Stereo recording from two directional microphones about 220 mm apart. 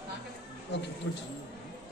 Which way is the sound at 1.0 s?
55° left (ahead or behind).